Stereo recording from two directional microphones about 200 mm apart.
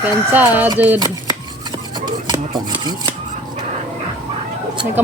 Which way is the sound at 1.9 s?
20° right (ahead or behind).